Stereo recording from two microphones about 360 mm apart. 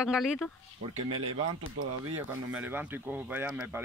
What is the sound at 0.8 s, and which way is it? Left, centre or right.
Speech, centre.